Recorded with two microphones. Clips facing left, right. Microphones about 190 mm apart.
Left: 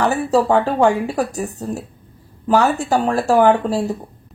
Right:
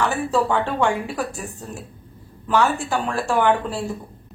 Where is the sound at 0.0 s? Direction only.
40° left (ahead or behind).